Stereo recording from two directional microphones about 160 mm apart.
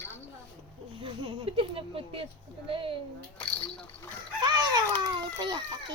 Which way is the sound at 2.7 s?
35° right (ahead or behind).